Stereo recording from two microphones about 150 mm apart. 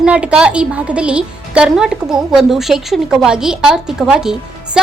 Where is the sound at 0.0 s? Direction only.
10° right (ahead or behind).